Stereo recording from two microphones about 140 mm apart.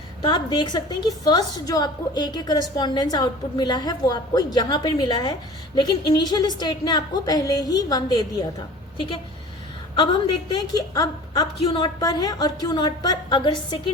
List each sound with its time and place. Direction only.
0.2 s a woman's voice: 30° left (ahead or behind)
10.5 s a woman's voice: 25° left (ahead or behind)